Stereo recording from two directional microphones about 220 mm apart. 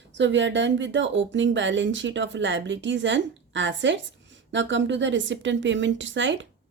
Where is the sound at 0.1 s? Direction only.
55° right (ahead or behind).